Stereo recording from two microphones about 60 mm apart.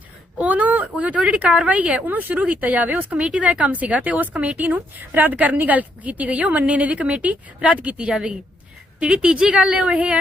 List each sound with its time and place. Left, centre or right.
0.3 s a woman's voice: right